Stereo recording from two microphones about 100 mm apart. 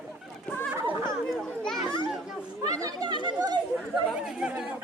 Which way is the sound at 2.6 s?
35° right (ahead or behind).